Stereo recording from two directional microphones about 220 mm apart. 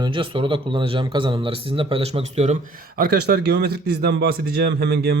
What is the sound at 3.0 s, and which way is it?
A man's voice, 45° right (ahead or behind).